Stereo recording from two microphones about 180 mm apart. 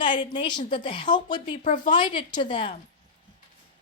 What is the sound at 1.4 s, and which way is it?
Speech, 40° left (ahead or behind).